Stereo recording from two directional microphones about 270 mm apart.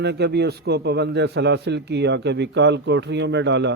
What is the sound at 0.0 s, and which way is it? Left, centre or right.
A man's voice, right.